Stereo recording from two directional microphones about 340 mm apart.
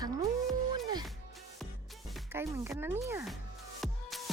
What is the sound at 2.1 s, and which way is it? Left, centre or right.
Speech, centre.